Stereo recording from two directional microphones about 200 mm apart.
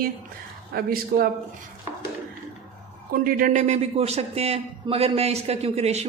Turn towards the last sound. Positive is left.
turn(degrees=-30)  # may be behind; listen again after turning